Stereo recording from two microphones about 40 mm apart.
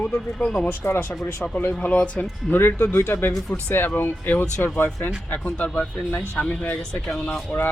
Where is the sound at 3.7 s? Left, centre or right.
Left.